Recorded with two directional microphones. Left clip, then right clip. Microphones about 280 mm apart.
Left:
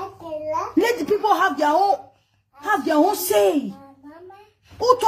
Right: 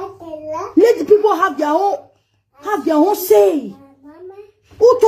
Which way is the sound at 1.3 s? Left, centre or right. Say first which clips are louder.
Right 2 dB; left.